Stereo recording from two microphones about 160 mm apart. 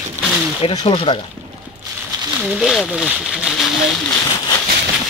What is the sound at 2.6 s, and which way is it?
Speech, 5° right (ahead or behind).